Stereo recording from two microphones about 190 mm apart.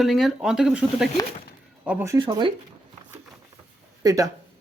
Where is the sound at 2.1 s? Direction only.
25° right (ahead or behind).